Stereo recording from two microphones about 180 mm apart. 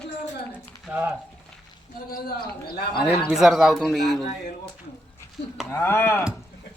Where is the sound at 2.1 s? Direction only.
55° left (ahead or behind).